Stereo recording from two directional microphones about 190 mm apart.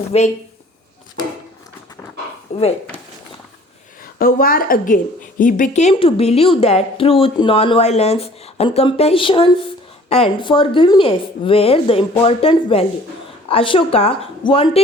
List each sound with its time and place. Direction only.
0.1 s a woman's voice: 35° left (ahead or behind)
2.5 s speech: 35° left (ahead or behind)
4.0 s a woman's voice: 50° left (ahead or behind); by 14.8 s 30° left (ahead or behind)